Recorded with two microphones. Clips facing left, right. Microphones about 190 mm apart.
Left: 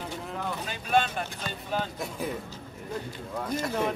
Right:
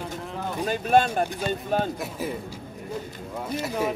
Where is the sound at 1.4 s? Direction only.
45° right (ahead or behind).